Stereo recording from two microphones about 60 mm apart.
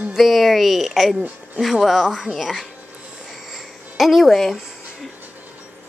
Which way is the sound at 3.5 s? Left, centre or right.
Centre.